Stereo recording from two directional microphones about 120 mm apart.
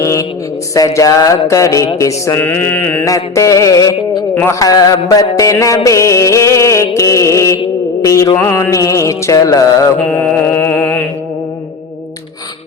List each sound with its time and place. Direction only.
0.0 s mantra: 25° left (ahead or behind)
0.7 s music: 30° left (ahead or behind)
2.0 s a sound: 25° left (ahead or behind)
3.0 s music: 25° left (ahead or behind)
10.1 s music: 15° left (ahead or behind)